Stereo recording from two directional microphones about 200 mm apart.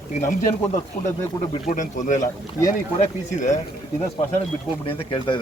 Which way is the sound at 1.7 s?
40° left (ahead or behind).